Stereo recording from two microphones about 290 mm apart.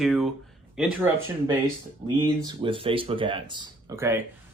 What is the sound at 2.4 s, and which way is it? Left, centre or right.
Speech, centre.